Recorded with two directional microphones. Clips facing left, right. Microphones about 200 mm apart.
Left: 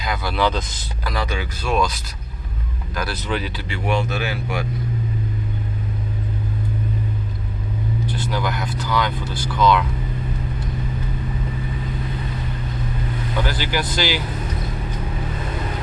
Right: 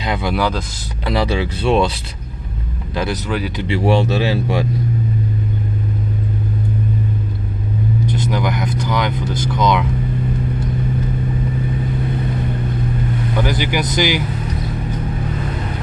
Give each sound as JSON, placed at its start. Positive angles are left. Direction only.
{"t": 0.0, "sound": "speech", "side_deg": -25}
{"t": 0.3, "sound": "speech", "side_deg": -10}
{"t": 1.0, "sound": "speech", "side_deg": -30}
{"t": 3.2, "sound": "speech", "side_deg": -5}
{"t": 3.5, "sound": "speech", "side_deg": -25}
{"t": 8.3, "sound": "speech", "side_deg": -20}
{"t": 13.4, "sound": "speech", "side_deg": -15}